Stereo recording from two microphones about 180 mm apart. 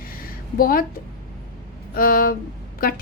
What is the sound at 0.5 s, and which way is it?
Speech, 55° left (ahead or behind).